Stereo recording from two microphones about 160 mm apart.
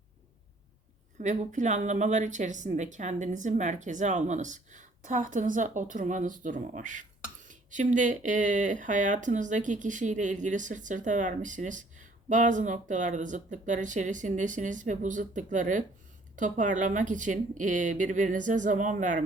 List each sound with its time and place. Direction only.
1.2 s speech: 50° right (ahead or behind)